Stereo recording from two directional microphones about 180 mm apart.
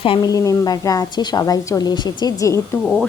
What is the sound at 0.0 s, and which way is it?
A woman's voice, 25° left (ahead or behind).